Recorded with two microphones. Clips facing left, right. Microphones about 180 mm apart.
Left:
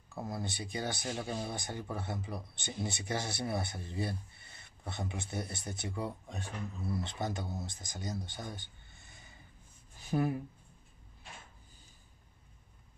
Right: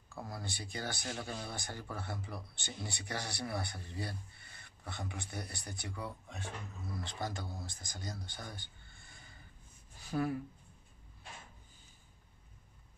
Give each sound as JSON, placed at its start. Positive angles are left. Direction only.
{"t": 0.1, "sound": "speech", "side_deg": 20}
{"t": 6.0, "sound": "speech", "side_deg": 35}
{"t": 7.0, "sound": "speech", "side_deg": 20}